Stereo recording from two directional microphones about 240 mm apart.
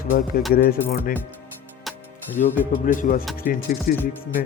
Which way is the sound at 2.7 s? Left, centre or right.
Left.